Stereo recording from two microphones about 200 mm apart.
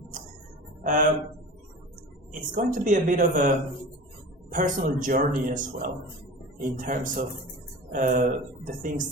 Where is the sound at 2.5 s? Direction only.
40° right (ahead or behind).